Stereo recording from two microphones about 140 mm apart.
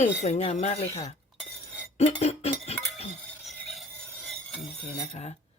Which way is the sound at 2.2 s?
50° left (ahead or behind).